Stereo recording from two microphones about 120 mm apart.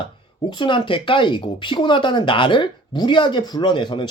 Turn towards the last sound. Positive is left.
turn(degrees=40)  # may be behind; listen again after turning